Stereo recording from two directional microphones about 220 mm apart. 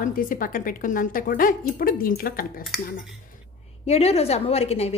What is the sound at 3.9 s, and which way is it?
A woman's voice, 30° left (ahead or behind).